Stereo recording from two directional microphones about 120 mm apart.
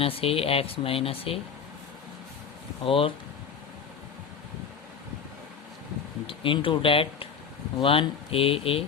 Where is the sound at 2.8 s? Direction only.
50° left (ahead or behind).